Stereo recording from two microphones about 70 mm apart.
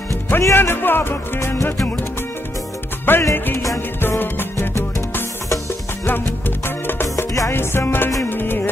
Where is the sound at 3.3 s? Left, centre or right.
Left.